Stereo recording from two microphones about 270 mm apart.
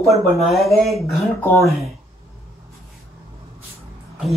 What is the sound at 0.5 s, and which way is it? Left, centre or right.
Speech, centre.